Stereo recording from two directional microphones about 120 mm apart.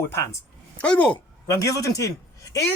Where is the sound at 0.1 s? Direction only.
25° left (ahead or behind).